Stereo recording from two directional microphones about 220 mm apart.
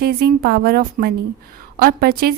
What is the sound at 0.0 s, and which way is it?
A woman's voice, 45° right (ahead or behind).